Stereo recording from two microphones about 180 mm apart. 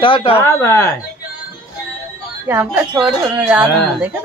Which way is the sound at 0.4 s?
15° left (ahead or behind).